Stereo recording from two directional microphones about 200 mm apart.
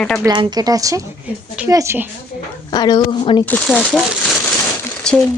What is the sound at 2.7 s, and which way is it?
Speech, 20° left (ahead or behind).